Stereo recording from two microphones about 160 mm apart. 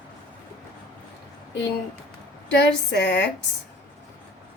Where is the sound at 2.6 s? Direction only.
90° left.